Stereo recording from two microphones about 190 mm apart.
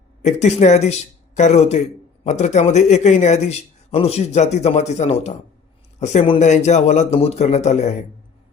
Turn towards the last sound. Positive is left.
turn(degrees=35)  # may be behind; listen again after turning